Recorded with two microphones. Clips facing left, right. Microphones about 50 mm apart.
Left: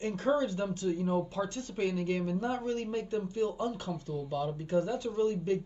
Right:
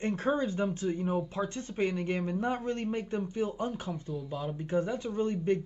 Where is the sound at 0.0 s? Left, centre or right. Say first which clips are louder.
Even; right.